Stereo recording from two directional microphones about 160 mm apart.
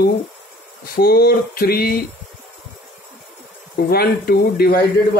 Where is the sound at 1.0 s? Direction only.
75° left (ahead or behind).